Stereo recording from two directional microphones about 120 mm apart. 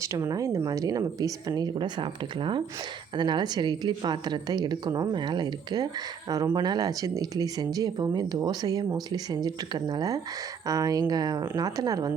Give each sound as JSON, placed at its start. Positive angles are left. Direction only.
{"t": 0.0, "sound": "a woman's voice", "side_deg": -25}